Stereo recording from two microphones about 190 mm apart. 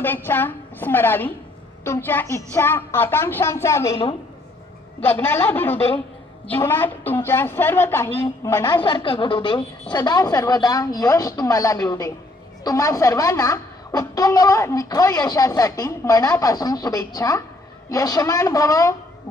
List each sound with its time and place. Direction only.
0.0 s a woman's voice: 10° left (ahead or behind)
5.0 s a woman's voice: 10° left (ahead or behind)
8.8 s a woman's voice: 25° left (ahead or behind)